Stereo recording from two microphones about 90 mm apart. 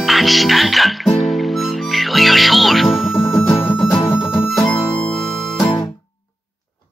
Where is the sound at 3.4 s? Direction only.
25° left (ahead or behind).